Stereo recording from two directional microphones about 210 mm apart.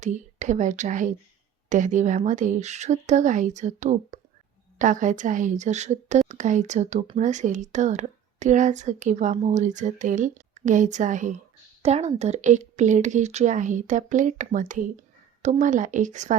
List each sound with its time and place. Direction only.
0.0 s a woman's voice: 35° right (ahead or behind)